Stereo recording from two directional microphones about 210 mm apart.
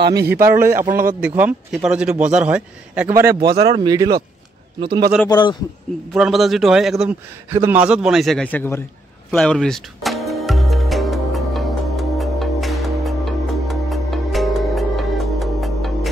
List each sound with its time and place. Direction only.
0.0 s a man's voice: 50° right (ahead or behind)
0.3 s a man's voice: 10° right (ahead or behind)
5.2 s a man's voice: 20° left (ahead or behind)
6.1 s a man's voice: centre (ahead or behind)
9.3 s music: 5° left (ahead or behind)